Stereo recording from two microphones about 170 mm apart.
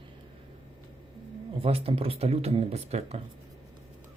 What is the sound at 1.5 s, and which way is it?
Speech, 35° right (ahead or behind).